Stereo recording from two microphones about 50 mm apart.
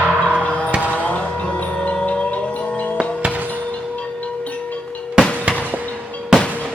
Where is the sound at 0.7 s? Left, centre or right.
Right.